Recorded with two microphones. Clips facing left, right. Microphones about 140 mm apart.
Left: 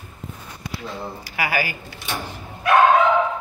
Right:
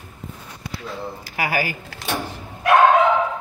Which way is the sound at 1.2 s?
45° right (ahead or behind).